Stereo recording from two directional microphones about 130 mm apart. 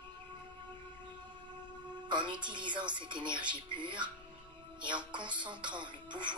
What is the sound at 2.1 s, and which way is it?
A woman's voice, 35° right (ahead or behind).